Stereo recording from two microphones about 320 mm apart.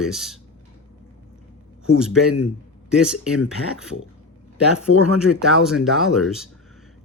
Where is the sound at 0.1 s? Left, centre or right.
Centre.